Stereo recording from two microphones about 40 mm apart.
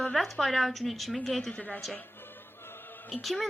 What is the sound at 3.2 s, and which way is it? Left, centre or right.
Speech, centre.